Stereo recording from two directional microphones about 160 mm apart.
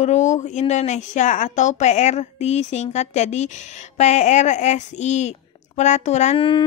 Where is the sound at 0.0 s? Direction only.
45° left (ahead or behind).